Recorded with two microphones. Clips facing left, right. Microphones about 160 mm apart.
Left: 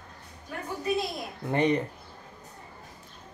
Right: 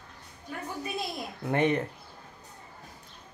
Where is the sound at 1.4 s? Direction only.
5° right (ahead or behind).